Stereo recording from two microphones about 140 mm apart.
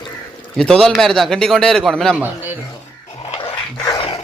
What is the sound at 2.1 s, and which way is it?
Speech, 15° right (ahead or behind).